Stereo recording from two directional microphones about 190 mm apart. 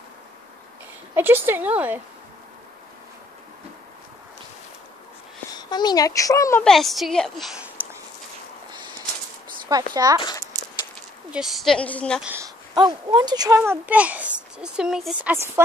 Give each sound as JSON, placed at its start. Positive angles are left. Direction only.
{"t": 1.1, "sound": "a child's voice", "side_deg": -10}
{"t": 5.5, "sound": "a child's voice", "side_deg": 20}
{"t": 6.6, "sound": "a woman's voice", "side_deg": 0}
{"t": 7.6, "sound": "a sound", "side_deg": -10}
{"t": 9.9, "sound": "speech", "side_deg": -20}
{"t": 11.3, "sound": "a woman's voice", "side_deg": 0}
{"t": 12.7, "sound": "a child's voice", "side_deg": -20}